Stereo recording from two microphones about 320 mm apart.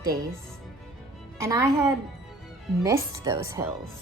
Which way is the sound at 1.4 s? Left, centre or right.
Centre.